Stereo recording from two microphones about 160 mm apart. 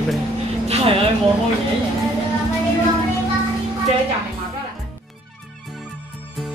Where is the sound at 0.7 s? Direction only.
40° right (ahead or behind).